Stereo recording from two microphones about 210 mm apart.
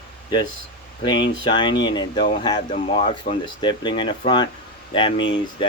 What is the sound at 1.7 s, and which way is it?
Speech, 60° left (ahead or behind).